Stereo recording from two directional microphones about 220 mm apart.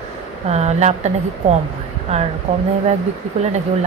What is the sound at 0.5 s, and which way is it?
Speech, 30° right (ahead or behind).